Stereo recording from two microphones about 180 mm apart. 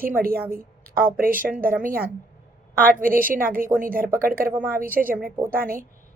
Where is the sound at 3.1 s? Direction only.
50° right (ahead or behind).